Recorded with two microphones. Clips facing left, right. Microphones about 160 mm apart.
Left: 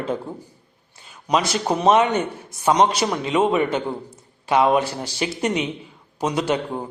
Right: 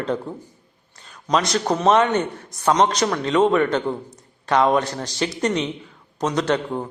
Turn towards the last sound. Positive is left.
turn(degrees=10)  # may be behind; listen again after turning